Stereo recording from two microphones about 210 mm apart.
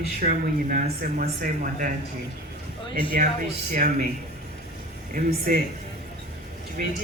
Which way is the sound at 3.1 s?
40° right (ahead or behind).